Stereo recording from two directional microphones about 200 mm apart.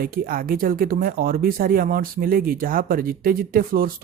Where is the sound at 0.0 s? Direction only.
45° right (ahead or behind).